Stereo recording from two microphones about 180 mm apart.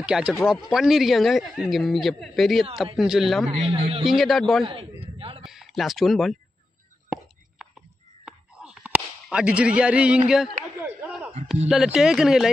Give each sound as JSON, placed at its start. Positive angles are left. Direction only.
{"t": 0.0, "sound": "speech", "side_deg": -5}
{"t": 3.4, "sound": "a man's voice", "side_deg": -35}
{"t": 4.0, "sound": "speech", "side_deg": 0}
{"t": 4.6, "sound": "a sound", "side_deg": -30}
{"t": 5.4, "sound": "speech", "side_deg": 0}
{"t": 8.3, "sound": "a sound", "side_deg": -5}
{"t": 10.2, "sound": "speech", "side_deg": -5}
{"t": 10.8, "sound": "a sound", "side_deg": -5}
{"t": 11.7, "sound": "speech", "side_deg": 0}